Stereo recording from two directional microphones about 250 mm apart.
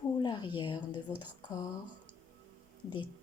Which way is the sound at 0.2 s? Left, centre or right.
Centre.